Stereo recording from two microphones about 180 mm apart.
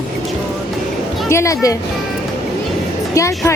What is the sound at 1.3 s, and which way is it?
Speech, 15° left (ahead or behind).